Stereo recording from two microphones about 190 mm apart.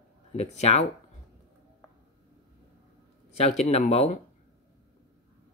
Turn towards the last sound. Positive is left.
turn(degrees=35)  # may be behind; listen again after turning